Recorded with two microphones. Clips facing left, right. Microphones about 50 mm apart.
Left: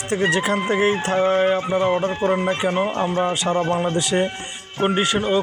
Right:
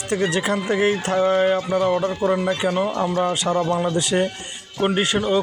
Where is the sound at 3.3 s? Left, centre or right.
Centre.